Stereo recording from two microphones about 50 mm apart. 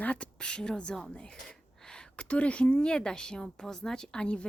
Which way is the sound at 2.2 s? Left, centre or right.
Left.